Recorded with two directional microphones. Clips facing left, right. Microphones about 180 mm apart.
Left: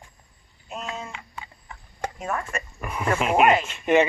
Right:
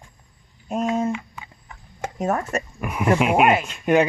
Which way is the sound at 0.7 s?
45° right (ahead or behind).